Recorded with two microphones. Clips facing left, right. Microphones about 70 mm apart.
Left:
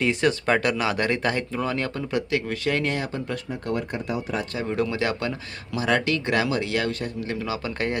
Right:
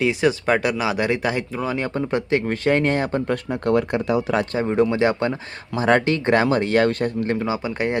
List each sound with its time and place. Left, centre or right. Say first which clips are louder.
0.0 s speech: right 3 dB; centre
1.9 s speech: right 4 dB; right
3.5 s speech: right 9 dB; right
4.5 s speech: right 6 dB; right
7.4 s speech: right 4 dB; right